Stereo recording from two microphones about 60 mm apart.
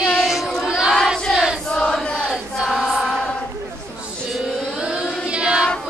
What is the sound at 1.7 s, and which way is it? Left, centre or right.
Chant, centre.